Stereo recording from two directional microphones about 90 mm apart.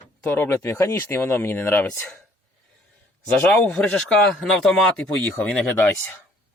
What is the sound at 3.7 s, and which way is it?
A man's voice, 10° left (ahead or behind).